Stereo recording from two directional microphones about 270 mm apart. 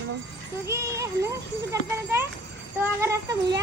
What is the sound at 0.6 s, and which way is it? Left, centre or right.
A woman's voice, centre.